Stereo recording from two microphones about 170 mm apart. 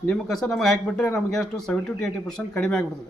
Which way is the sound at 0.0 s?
5° left (ahead or behind).